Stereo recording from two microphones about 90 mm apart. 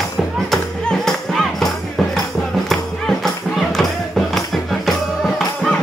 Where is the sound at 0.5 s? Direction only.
5° left (ahead or behind).